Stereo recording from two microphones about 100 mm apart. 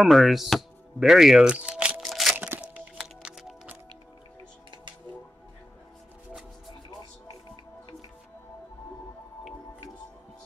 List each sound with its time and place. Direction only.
0.0 s speech: centre (ahead or behind)
2.3 s crunch: 20° right (ahead or behind)
3.0 s music: 5° right (ahead or behind)